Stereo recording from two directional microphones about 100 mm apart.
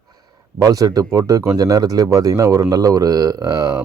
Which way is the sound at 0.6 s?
35° right (ahead or behind).